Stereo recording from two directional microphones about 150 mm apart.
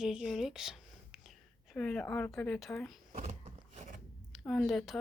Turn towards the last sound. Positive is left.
turn(degrees=0)  # may be behind; listen again after turning